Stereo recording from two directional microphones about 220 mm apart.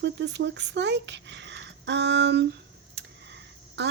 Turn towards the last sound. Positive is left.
turn(degrees=-50)  # may be behind; listen again after turning